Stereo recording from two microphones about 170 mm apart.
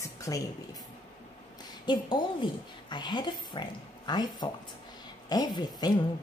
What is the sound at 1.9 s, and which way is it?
A woman's voice, 25° left (ahead or behind).